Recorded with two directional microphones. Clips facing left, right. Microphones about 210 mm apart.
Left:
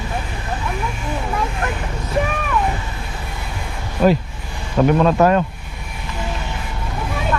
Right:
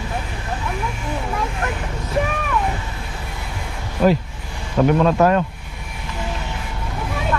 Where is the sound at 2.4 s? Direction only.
20° left (ahead or behind).